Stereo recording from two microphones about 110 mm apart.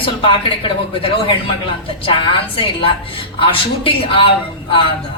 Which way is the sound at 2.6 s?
55° left (ahead or behind).